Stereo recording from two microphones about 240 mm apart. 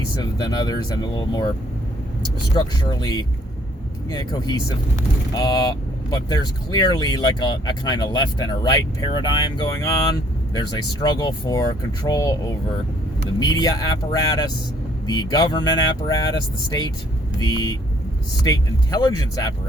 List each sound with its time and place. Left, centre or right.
0.2 s speech: centre
2.6 s speech: centre